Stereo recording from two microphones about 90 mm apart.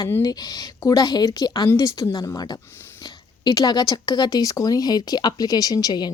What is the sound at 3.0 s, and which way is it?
Speech, 50° left (ahead or behind).